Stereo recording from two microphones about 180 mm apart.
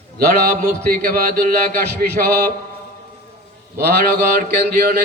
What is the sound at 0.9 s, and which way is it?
A man's voice, 55° right (ahead or behind).